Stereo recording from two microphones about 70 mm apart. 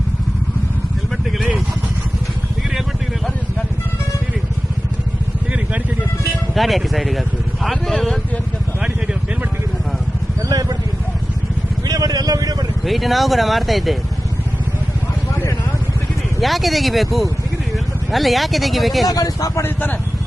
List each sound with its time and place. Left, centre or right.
5.5 s vehicle: centre
6.5 s speech: centre
10.5 s speech: right
11.9 s vehicle: right
12.8 s speech: centre
16.4 s speech: centre
19.0 s speech: left
19.6 s speech: left